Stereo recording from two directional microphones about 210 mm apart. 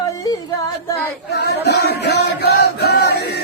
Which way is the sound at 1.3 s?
50° left (ahead or behind).